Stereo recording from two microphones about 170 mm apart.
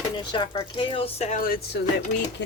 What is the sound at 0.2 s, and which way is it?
Speech, 30° left (ahead or behind).